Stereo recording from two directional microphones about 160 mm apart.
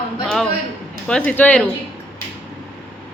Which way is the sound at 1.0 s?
5° left (ahead or behind).